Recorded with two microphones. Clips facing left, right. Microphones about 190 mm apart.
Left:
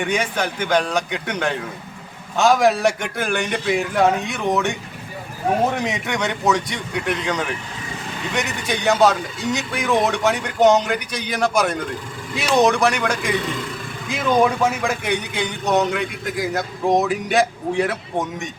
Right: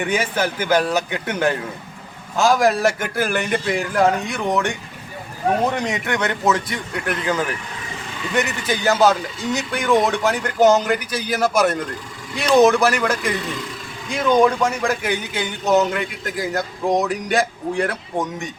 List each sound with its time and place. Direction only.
0.0 s speech: 5° right (ahead or behind)